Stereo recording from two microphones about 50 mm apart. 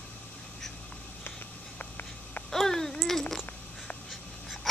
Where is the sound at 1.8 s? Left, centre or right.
Left.